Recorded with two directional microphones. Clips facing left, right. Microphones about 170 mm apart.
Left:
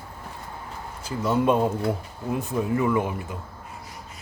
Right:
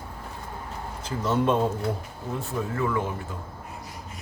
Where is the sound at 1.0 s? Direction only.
10° left (ahead or behind).